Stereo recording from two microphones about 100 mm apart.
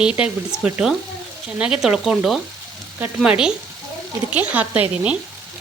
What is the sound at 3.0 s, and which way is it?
Frying, 10° right (ahead or behind).